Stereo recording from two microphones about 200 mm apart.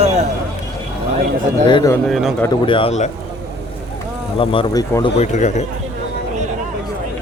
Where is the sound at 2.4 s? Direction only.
25° left (ahead or behind).